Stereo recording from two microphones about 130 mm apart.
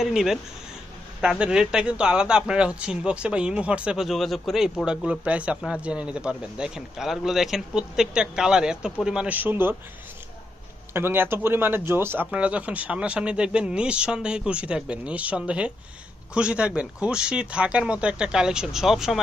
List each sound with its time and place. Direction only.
0.0 s speech: 5° right (ahead or behind)
10.9 s speech: 15° right (ahead or behind)